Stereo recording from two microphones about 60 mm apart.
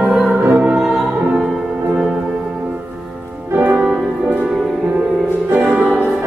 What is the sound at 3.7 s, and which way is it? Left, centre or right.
Music, right.